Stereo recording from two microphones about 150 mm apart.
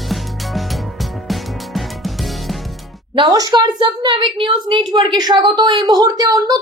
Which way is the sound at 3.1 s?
30° right (ahead or behind).